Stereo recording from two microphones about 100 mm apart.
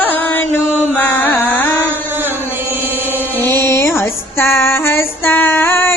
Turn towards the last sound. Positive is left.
turn(degrees=25)  # may be behind; listen again after turning